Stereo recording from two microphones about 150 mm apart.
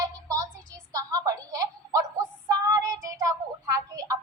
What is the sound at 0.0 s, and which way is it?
Music, 25° right (ahead or behind).